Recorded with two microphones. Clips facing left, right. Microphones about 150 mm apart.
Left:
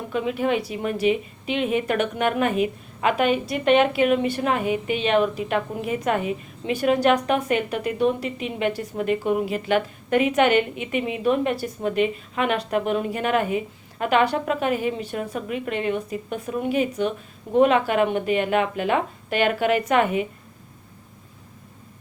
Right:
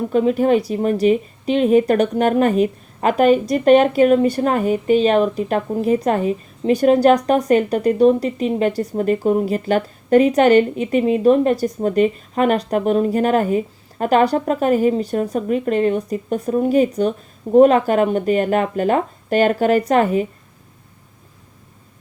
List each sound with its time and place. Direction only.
0.1 s speech: 40° right (ahead or behind)